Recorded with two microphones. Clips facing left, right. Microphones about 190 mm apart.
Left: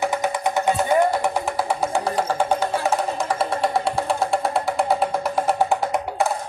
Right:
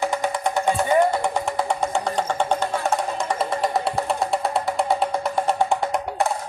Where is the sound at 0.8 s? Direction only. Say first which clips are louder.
Right 1 dB; 5° left (ahead or behind).